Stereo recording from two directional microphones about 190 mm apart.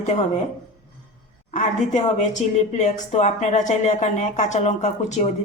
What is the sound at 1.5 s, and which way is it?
A woman's voice, 40° left (ahead or behind).